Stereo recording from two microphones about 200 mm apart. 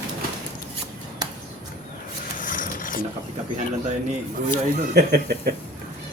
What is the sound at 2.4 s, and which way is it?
Rub, 40° left (ahead or behind).